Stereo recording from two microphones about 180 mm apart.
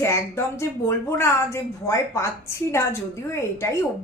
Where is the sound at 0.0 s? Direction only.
15° left (ahead or behind).